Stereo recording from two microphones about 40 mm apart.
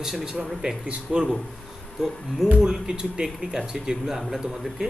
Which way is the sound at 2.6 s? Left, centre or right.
Centre.